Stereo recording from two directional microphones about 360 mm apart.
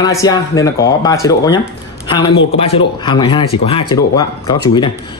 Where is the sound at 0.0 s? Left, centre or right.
Centre.